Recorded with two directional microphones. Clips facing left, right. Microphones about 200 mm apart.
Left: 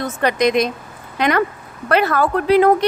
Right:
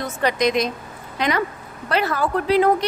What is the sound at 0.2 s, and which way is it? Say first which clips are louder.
Speech: left 3 dB; 60° left (ahead or behind).